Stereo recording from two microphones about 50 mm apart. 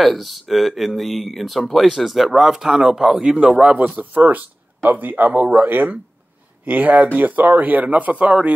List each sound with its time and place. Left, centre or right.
0.0 s speech: centre; by 8.5 s right